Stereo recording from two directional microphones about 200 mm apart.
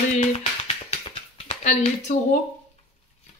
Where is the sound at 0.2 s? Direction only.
35° left (ahead or behind).